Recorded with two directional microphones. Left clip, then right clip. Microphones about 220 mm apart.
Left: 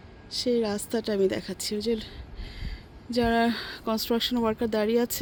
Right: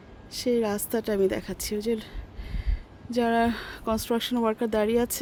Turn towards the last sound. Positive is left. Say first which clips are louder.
# right 1 dB
turn(degrees=5)  # may be behind; listen again after turning